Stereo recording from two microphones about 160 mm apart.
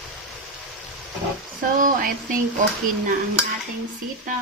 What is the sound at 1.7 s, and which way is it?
Speech, 55° right (ahead or behind).